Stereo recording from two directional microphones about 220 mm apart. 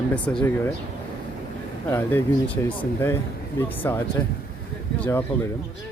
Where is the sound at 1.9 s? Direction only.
10° left (ahead or behind).